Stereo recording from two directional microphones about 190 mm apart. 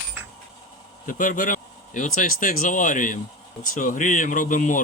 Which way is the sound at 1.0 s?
45° left (ahead or behind).